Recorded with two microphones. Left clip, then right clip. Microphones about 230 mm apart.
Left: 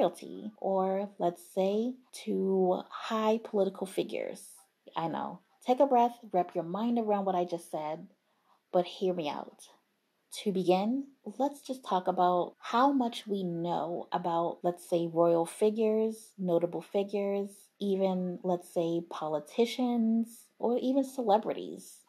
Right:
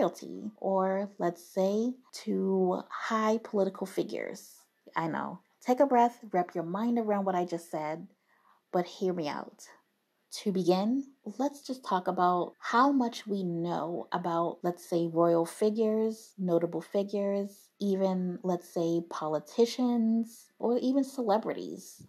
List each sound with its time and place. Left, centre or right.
0.2 s speech: right